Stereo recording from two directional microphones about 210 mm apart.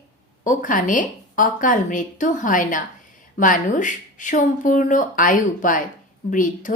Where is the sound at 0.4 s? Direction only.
40° left (ahead or behind).